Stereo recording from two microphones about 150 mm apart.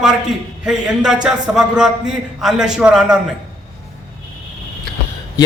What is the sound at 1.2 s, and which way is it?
A man's voice, 5° right (ahead or behind).